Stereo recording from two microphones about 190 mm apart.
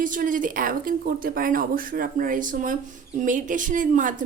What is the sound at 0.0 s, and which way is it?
Speech, 45° right (ahead or behind).